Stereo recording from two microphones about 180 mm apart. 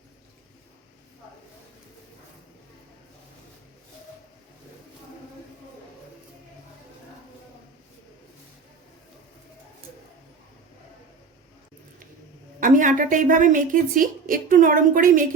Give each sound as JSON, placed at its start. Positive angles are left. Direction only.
{"t": 12.5, "sound": "a woman's voice", "side_deg": -45}